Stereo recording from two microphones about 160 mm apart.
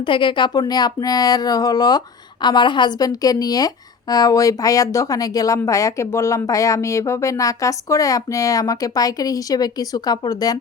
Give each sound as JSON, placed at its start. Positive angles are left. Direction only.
{"t": 0.0, "sound": "speech", "side_deg": 30}